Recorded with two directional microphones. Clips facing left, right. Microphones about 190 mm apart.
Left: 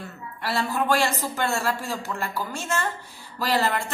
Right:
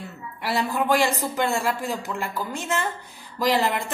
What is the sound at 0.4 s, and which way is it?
A woman's voice, 15° right (ahead or behind).